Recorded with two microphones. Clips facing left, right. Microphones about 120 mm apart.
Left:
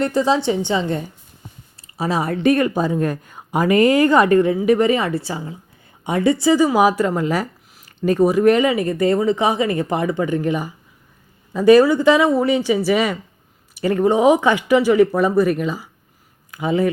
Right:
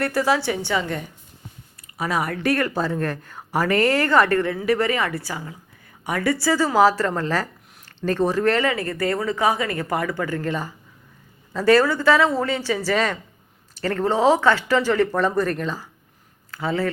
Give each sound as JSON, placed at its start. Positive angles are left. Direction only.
{"t": 0.0, "sound": "speech", "side_deg": 20}